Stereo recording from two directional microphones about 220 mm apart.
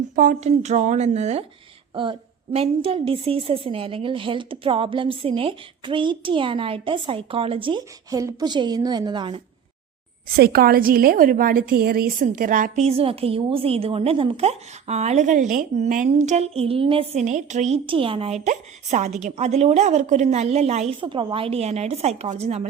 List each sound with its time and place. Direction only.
0.2 s a woman's voice: 35° right (ahead or behind)
10.3 s a woman's voice: 45° right (ahead or behind); by 22.7 s 30° right (ahead or behind)